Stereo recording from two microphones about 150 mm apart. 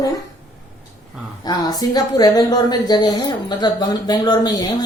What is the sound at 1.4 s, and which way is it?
Speech, 25° left (ahead or behind).